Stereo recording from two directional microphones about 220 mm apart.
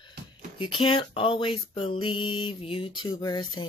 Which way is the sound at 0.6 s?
20° left (ahead or behind).